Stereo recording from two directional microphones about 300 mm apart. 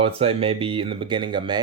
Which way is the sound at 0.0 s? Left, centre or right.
Centre.